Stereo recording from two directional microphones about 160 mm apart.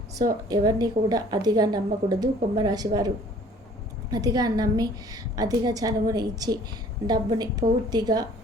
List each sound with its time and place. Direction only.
0.4 s a woman's voice: 25° right (ahead or behind)
4.1 s a woman's voice: 25° right (ahead or behind)